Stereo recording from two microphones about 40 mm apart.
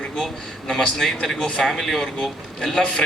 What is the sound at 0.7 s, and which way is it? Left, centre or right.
Speech, centre.